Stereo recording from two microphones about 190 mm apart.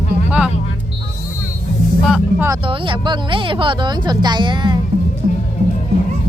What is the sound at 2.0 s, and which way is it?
Vehicle, centre (ahead or behind).